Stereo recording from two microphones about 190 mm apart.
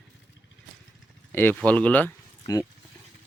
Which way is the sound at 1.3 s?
10° left (ahead or behind).